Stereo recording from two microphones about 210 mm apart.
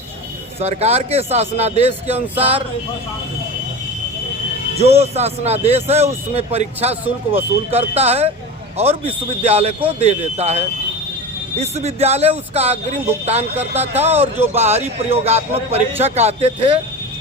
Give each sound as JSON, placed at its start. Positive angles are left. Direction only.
{"t": 0.6, "sound": "a man's voice", "side_deg": -30}
{"t": 4.8, "sound": "a man's voice", "side_deg": -30}